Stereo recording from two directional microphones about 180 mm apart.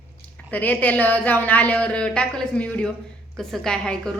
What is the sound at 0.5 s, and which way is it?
A woman's voice, 10° left (ahead or behind).